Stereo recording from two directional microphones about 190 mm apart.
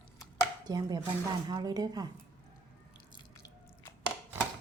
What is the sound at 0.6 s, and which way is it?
Speech, 20° right (ahead or behind).